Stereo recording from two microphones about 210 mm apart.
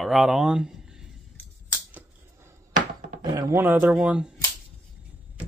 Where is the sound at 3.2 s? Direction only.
15° right (ahead or behind).